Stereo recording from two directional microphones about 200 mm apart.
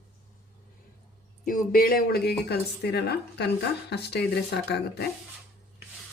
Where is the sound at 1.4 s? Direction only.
45° left (ahead or behind).